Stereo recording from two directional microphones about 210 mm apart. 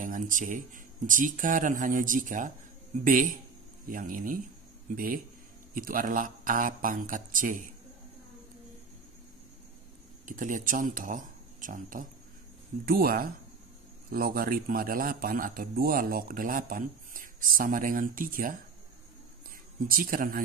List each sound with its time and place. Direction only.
0.0 s a man's voice: 40° right (ahead or behind)
10.2 s a man's voice: 40° right (ahead or behind)
19.9 s speech: 40° right (ahead or behind)